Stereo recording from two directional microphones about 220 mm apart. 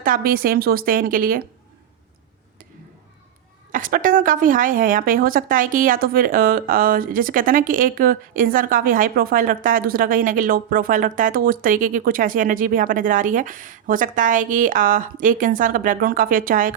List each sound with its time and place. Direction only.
0.0 s a woman's voice: 40° right (ahead or behind)
3.7 s a woman's voice: 40° right (ahead or behind)